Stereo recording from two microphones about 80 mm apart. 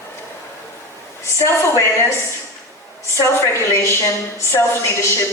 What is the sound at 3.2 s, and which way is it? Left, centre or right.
A woman's voice, left.